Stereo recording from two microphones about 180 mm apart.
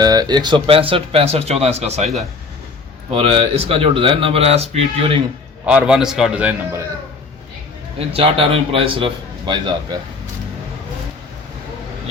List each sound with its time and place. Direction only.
0.0 s speech: 20° right (ahead or behind)
3.1 s speech: 35° right (ahead or behind)
5.6 s a man's voice: 5° right (ahead or behind)
7.9 s speech: 30° right (ahead or behind)